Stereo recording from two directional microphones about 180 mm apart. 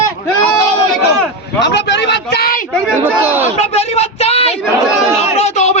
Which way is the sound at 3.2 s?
10° right (ahead or behind).